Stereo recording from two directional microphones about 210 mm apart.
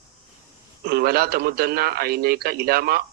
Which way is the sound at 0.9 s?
45° right (ahead or behind).